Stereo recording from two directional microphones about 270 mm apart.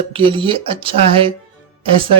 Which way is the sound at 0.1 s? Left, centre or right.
Centre.